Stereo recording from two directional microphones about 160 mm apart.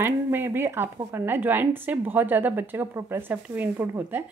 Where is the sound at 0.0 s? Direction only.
15° right (ahead or behind).